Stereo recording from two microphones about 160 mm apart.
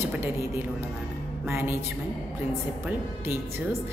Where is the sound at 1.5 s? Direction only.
15° right (ahead or behind).